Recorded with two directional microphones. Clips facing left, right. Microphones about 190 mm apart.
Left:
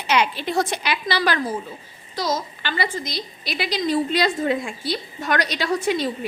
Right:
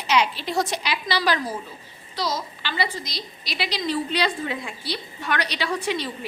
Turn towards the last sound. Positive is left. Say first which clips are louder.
# left 4 dB
turn(degrees=45)  # may be behind; listen again after turning